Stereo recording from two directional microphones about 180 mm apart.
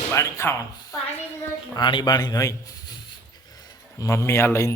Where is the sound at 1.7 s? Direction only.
25° left (ahead or behind).